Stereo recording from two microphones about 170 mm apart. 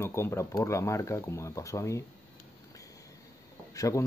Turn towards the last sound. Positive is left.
turn(degrees=20)  # may be behind; listen again after turning